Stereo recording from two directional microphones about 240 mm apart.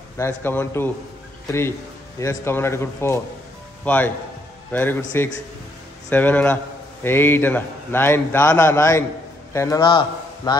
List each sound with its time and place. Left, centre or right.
0.2 s a man's voice: centre
2.1 s a man's voice: centre
6.0 s a man's voice: centre